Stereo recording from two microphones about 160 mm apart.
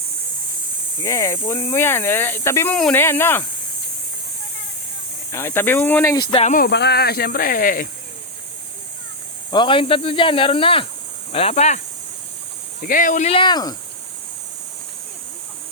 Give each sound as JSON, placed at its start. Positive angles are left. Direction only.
{"t": 1.0, "sound": "speech", "side_deg": 20}
{"t": 2.7, "sound": "speech", "side_deg": 5}
{"t": 3.0, "sound": "speech", "side_deg": 15}
{"t": 5.3, "sound": "speech", "side_deg": 15}
{"t": 6.1, "sound": "speech", "side_deg": 30}
{"t": 6.4, "sound": "speech", "side_deg": 55}
{"t": 6.7, "sound": "speech", "side_deg": 90}
{"t": 9.5, "sound": "speech", "side_deg": 30}
{"t": 12.8, "sound": "speech", "side_deg": 60}
{"t": 13.3, "sound": "speech", "side_deg": 30}